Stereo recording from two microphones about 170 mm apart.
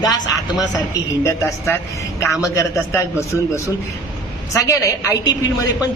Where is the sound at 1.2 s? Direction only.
15° left (ahead or behind).